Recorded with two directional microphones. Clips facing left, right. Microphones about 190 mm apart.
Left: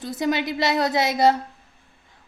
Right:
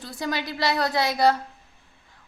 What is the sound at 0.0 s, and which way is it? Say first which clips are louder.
A woman's voice: left 6 dB; 20° left (ahead or behind).